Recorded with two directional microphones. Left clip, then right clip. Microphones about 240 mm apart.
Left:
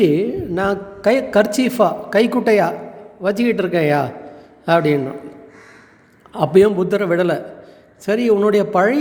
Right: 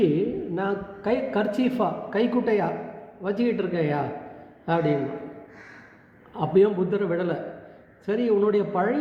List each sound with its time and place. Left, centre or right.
0.0 s a man's voice: left
6.3 s a man's voice: left